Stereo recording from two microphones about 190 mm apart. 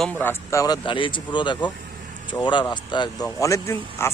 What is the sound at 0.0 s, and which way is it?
Speech, 10° left (ahead or behind).